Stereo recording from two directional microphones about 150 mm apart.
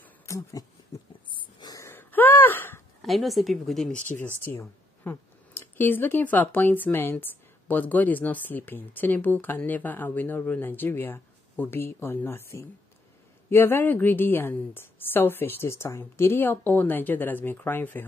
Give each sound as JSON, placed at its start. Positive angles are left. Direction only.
{"t": 0.0, "sound": "a sound", "side_deg": 20}
{"t": 3.0, "sound": "speech", "side_deg": 0}
{"t": 4.5, "sound": "speech", "side_deg": 15}